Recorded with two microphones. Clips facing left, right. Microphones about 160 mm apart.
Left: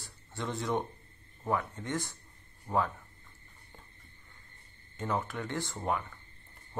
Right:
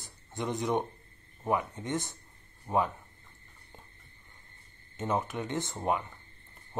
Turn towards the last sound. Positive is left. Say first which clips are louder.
# right 2 dB
turn(degrees=-20)  # may be behind; listen again after turning